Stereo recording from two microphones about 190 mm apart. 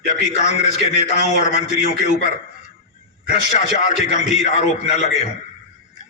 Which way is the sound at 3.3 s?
40° left (ahead or behind).